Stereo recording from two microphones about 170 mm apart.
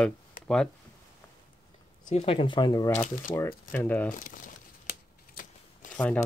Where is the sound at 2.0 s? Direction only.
30° left (ahead or behind).